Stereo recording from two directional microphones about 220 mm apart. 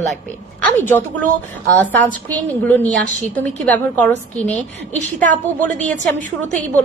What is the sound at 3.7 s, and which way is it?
A woman's voice, 5° left (ahead or behind).